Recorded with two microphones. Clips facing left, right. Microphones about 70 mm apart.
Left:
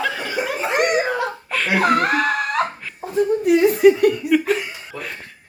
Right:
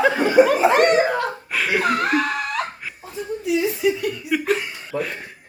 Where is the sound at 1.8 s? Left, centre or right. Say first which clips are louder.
Left 3 dB; left.